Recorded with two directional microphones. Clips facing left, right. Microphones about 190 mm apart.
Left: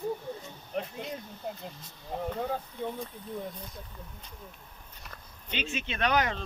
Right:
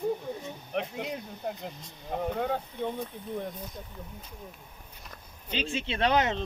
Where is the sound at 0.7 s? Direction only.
75° right (ahead or behind).